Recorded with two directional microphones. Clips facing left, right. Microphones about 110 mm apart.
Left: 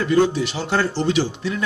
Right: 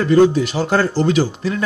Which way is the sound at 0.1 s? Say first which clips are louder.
Right 6 dB; 45° right (ahead or behind).